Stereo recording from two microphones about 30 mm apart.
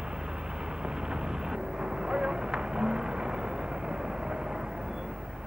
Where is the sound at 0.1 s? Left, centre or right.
Right.